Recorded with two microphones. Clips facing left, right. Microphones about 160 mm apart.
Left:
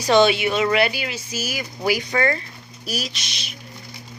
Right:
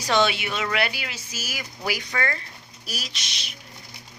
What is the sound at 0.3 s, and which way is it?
A woman's voice, 20° left (ahead or behind).